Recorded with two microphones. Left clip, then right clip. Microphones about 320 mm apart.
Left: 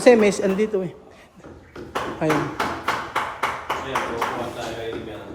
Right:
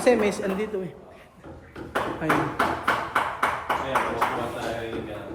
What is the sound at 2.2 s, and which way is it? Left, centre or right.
Speech, centre.